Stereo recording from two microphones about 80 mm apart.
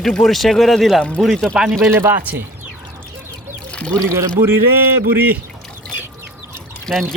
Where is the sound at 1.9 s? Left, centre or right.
Right.